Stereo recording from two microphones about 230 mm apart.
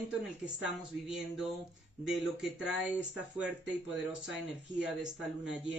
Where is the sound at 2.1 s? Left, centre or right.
Centre.